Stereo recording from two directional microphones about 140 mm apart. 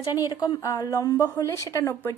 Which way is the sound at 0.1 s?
30° left (ahead or behind).